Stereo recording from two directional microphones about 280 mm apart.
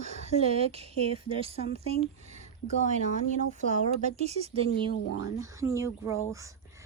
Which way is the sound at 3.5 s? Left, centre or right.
Right.